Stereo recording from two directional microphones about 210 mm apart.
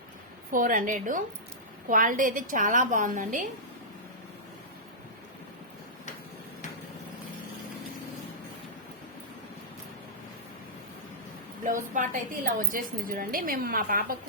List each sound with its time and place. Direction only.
0.5 s a woman's voice: 40° right (ahead or behind)
11.6 s a woman's voice: 40° right (ahead or behind)